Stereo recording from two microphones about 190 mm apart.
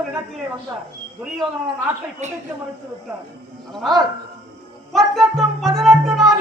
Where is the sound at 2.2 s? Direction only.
35° right (ahead or behind).